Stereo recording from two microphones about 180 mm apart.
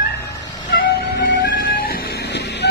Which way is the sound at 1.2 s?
50° left (ahead or behind).